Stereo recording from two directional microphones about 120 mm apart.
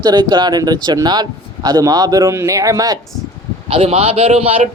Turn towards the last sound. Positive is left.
turn(degrees=-55)  # may be behind; listen again after turning